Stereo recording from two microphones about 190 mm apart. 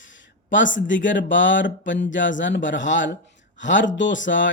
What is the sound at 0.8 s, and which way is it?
Speech, 75° left (ahead or behind).